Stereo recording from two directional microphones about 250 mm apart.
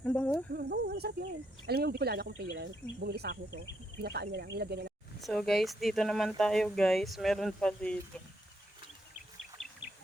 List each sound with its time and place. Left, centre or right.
0.0 s a sound: centre
0.5 s insect: right
1.6 s speech: right
5.2 s speech: centre
9.6 s bird: centre